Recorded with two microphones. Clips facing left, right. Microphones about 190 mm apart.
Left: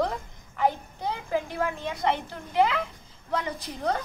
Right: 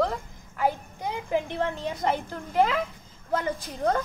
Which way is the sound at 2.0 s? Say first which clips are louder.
Left 1 dB; 45° right (ahead or behind).